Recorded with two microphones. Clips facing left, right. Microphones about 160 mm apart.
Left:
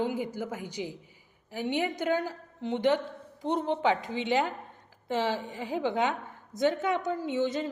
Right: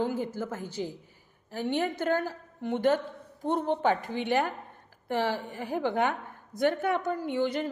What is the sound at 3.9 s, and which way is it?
A woman's voice, 15° left (ahead or behind).